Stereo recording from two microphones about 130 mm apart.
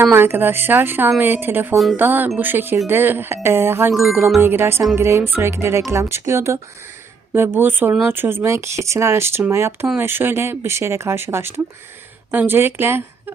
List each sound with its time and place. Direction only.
0.0 s speech: 15° right (ahead or behind)